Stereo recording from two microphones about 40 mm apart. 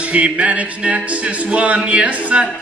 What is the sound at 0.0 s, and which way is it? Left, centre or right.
Music, right.